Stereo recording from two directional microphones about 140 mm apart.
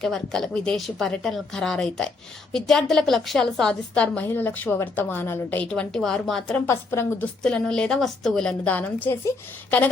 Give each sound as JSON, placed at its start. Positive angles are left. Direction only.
{"t": 0.0, "sound": "a woman's voice", "side_deg": 5}
{"t": 6.7, "sound": "a woman's voice", "side_deg": 15}
{"t": 7.4, "sound": "a woman's voice", "side_deg": 5}